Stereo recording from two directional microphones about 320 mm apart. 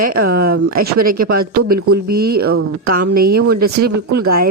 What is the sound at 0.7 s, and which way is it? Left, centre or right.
Speech, right.